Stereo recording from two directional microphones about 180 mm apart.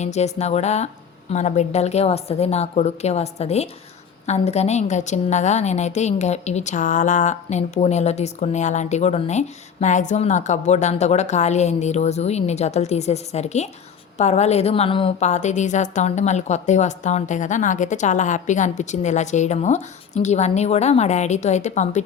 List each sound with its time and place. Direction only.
0.0 s a woman's voice: 40° left (ahead or behind)